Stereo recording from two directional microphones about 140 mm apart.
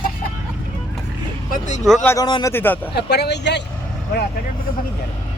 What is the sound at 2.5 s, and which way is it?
Speech, 15° left (ahead or behind).